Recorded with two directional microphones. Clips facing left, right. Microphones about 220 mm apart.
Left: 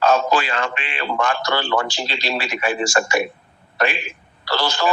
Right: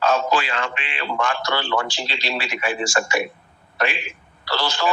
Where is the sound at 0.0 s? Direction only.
40° left (ahead or behind).